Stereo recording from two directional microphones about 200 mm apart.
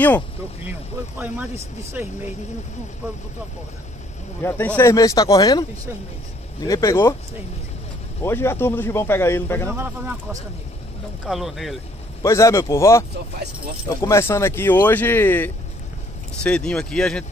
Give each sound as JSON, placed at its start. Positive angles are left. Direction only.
{"t": 0.7, "sound": "speech", "side_deg": -10}
{"t": 4.4, "sound": "speech", "side_deg": 10}
{"t": 8.2, "sound": "speech", "side_deg": 10}
{"t": 9.7, "sound": "speech", "side_deg": -10}
{"t": 11.2, "sound": "speech", "side_deg": 0}
{"t": 12.2, "sound": "speech", "side_deg": 15}